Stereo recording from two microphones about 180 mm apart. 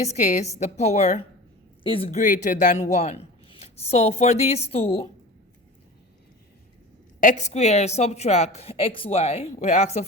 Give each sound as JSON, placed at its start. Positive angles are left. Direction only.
{"t": 0.0, "sound": "speech", "side_deg": 40}
{"t": 2.0, "sound": "speech", "side_deg": 45}
{"t": 7.2, "sound": "speech", "side_deg": 45}